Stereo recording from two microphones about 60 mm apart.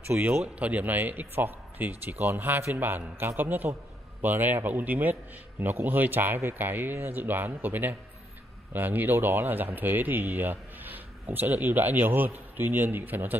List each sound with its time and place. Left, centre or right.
0.2 s speech: right